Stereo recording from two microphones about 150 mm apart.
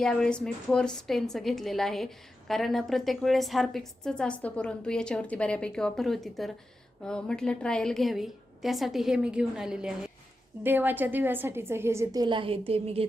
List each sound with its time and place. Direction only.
0.0 s a woman's voice: 5° left (ahead or behind); by 13.1 s 40° right (ahead or behind)